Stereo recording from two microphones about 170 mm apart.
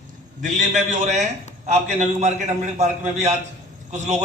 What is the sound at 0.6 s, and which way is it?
A man's voice, 45° right (ahead or behind).